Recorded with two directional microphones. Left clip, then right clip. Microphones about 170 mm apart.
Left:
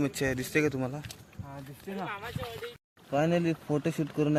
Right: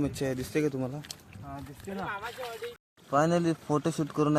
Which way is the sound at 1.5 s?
45° left (ahead or behind).